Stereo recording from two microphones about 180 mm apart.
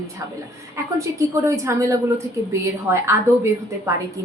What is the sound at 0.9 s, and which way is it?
A woman's voice, 15° right (ahead or behind).